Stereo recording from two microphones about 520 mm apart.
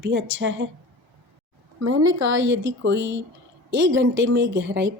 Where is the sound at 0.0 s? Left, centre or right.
Centre.